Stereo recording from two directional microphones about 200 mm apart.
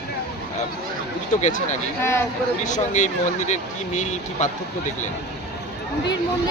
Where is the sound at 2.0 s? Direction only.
10° left (ahead or behind).